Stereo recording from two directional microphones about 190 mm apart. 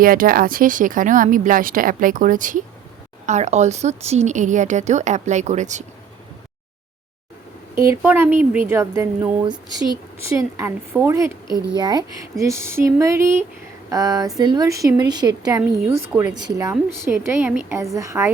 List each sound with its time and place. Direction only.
0.0 s a woman's voice: 50° right (ahead or behind)
7.8 s speech: 10° right (ahead or behind)
11.4 s a child's voice: 20° left (ahead or behind)
11.8 s speech: 20° right (ahead or behind)